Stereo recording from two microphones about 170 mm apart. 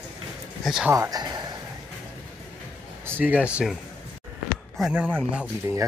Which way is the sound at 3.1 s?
10° right (ahead or behind).